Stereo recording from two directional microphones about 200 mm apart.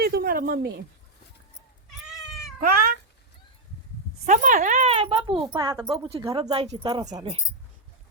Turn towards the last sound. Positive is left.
turn(degrees=-25)  # may be behind; listen again after turning